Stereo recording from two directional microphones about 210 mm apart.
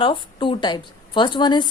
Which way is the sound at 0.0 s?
25° left (ahead or behind).